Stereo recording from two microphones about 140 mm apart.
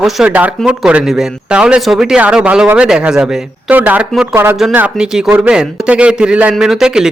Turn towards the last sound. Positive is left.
turn(degrees=-5)  # may be behind; listen again after turning